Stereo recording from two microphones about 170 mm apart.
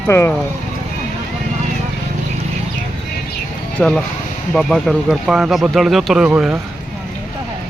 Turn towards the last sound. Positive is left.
turn(degrees=-5)  # may be behind; listen again after turning